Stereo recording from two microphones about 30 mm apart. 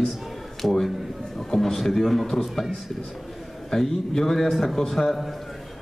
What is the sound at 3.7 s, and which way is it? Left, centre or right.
A man's voice, centre.